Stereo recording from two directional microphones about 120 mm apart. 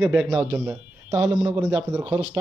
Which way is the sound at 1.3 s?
35° right (ahead or behind).